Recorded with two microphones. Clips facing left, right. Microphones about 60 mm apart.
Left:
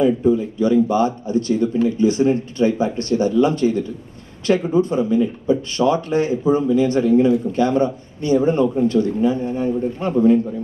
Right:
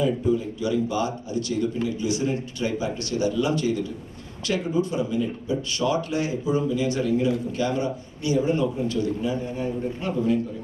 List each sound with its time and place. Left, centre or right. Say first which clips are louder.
0.0 s speech: left 7 dB; left